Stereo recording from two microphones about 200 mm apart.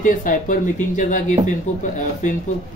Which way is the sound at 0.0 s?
40° left (ahead or behind).